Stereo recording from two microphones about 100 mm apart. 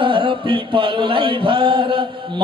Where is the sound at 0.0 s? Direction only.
60° right (ahead or behind).